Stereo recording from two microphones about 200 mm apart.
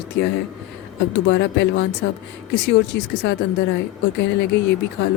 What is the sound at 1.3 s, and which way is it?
Speech, 65° left (ahead or behind).